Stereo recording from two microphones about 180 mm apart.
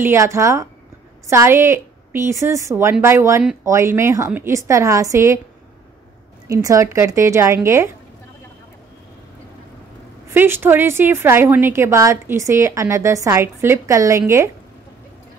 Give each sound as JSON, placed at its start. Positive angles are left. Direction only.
{"t": 0.0, "sound": "a woman's voice", "side_deg": -15}
{"t": 6.5, "sound": "a woman's voice", "side_deg": -15}
{"t": 10.3, "sound": "a woman's voice", "side_deg": -10}